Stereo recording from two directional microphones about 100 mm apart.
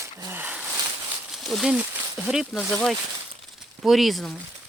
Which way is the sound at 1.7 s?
10° right (ahead or behind).